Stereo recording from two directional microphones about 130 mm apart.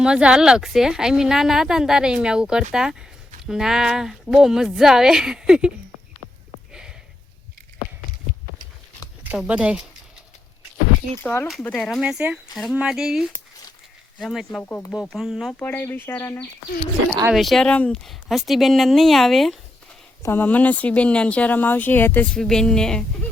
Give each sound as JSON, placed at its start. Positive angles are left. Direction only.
{"t": 0.0, "sound": "a woman's voice", "side_deg": -5}
{"t": 9.5, "sound": "speech", "side_deg": -10}
{"t": 11.2, "sound": "a woman's voice", "side_deg": 15}
{"t": 14.6, "sound": "speech", "side_deg": 15}
{"t": 15.0, "sound": "a woman's voice", "side_deg": 0}
{"t": 15.5, "sound": "speech", "side_deg": 15}
{"t": 17.3, "sound": "a woman's voice", "side_deg": 0}
{"t": 20.2, "sound": "speech", "side_deg": 15}
{"t": 22.4, "sound": "a woman's voice", "side_deg": 5}